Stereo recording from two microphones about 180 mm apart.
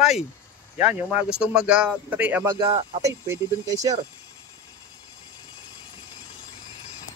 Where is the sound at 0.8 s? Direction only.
5° right (ahead or behind).